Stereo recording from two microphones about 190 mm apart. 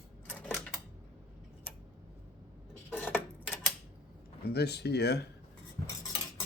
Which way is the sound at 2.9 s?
10° left (ahead or behind).